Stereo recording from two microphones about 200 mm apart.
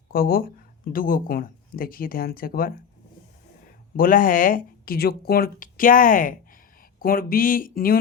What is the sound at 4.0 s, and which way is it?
Speech, 45° left (ahead or behind).